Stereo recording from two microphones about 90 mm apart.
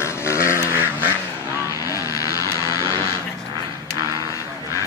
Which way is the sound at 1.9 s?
40° left (ahead or behind).